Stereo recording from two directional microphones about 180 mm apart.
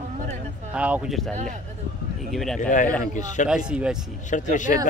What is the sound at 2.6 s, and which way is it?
Speech, 45° left (ahead or behind).